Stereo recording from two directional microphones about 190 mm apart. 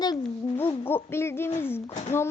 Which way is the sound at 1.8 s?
30° left (ahead or behind).